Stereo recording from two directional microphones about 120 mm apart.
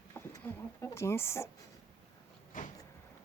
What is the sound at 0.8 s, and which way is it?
Speech, 20° left (ahead or behind).